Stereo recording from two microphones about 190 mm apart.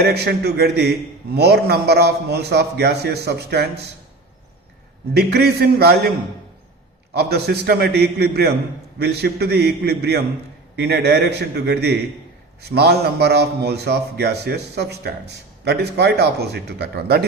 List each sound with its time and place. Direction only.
0.1 s a man's voice: 60° right (ahead or behind)
5.1 s a man's voice: 60° right (ahead or behind)
7.2 s a man's voice: 60° right (ahead or behind)